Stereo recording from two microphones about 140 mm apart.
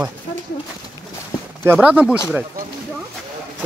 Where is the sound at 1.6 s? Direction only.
10° right (ahead or behind).